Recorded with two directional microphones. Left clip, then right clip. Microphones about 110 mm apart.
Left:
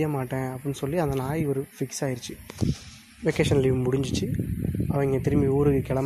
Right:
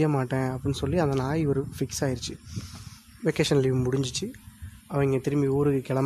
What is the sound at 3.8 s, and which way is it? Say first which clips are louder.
Speech: left 2 dB; 5° right (ahead or behind).